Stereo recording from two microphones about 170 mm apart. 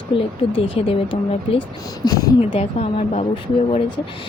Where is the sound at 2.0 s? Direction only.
20° left (ahead or behind).